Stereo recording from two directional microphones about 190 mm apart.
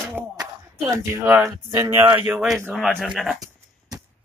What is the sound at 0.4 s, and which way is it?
Speech, 15° right (ahead or behind).